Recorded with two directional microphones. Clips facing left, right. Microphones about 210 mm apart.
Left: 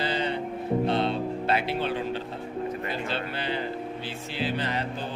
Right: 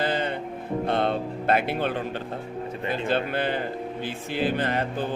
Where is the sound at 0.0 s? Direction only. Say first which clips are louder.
Right 2 dB; 50° right (ahead or behind).